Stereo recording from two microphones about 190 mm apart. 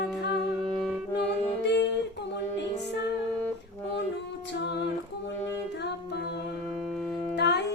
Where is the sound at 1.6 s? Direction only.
65° left (ahead or behind).